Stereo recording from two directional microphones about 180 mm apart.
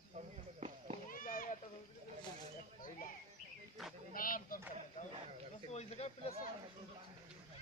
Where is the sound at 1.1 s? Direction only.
50° left (ahead or behind).